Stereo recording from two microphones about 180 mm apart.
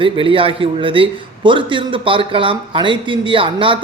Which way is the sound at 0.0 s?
30° right (ahead or behind).